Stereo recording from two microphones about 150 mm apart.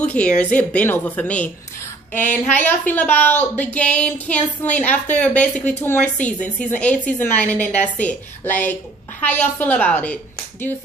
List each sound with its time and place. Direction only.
0.0 s a woman's voice: 10° left (ahead or behind)
2.5 s a woman's voice: 15° left (ahead or behind)